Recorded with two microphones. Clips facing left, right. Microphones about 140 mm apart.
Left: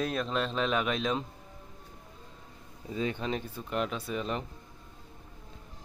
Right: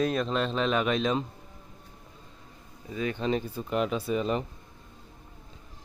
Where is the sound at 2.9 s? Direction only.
25° left (ahead or behind).